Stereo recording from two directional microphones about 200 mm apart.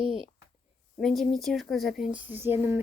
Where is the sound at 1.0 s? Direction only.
Centre (ahead or behind).